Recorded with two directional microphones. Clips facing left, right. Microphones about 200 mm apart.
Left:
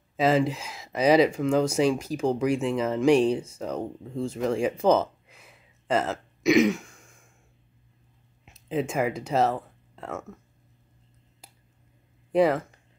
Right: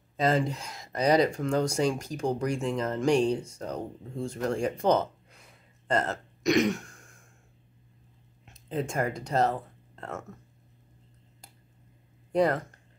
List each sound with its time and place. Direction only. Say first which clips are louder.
0.2 s speech: left 4 dB; 5° left (ahead or behind)
8.5 s speech: left 4 dB; 5° left (ahead or behind)
12.3 s speech: left 3 dB; 5° left (ahead or behind)